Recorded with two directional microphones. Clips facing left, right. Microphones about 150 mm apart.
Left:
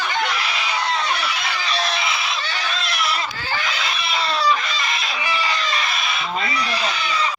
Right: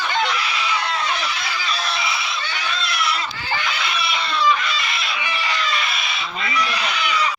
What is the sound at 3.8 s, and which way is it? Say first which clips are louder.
Chicken: left 1 dB; 40° left (ahead or behind).